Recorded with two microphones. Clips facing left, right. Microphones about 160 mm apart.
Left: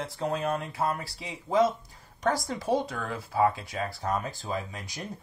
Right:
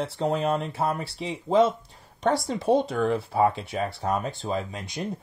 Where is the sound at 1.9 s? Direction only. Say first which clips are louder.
Right 4 dB; 25° right (ahead or behind).